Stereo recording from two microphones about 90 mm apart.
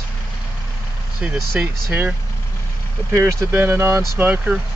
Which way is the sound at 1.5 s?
25° right (ahead or behind).